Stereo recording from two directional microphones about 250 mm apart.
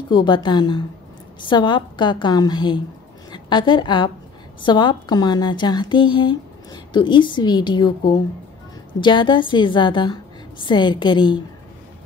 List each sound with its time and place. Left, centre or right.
0.1 s a woman's voice: centre
9.0 s a woman's voice: centre